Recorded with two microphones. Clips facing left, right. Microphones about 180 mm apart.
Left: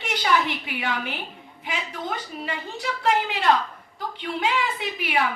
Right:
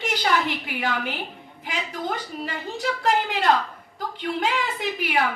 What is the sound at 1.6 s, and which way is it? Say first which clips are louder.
A woman's voice: right 2 dB; 45° right (ahead or behind).